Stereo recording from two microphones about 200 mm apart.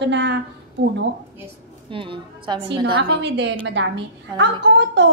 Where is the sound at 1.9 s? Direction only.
25° right (ahead or behind).